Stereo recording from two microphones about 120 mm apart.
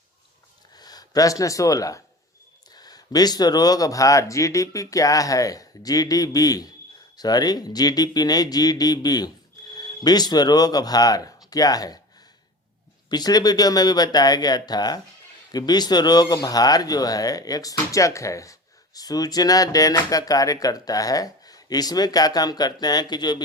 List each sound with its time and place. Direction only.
0.8 s speech: 35° left (ahead or behind)
13.1 s speech: 35° left (ahead or behind)